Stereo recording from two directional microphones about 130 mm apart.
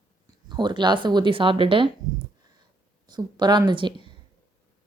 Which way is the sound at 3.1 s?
35° right (ahead or behind).